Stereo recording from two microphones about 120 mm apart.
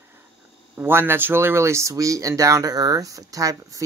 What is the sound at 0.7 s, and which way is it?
Speech, 20° right (ahead or behind).